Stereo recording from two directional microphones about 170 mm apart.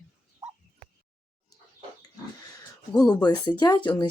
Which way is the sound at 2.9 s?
25° left (ahead or behind).